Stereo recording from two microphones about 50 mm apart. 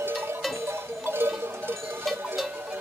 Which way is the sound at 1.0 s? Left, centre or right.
Right.